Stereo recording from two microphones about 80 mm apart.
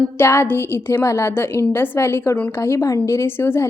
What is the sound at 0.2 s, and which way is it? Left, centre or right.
A woman's voice, left.